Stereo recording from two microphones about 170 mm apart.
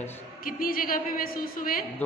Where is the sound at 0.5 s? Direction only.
60° left (ahead or behind).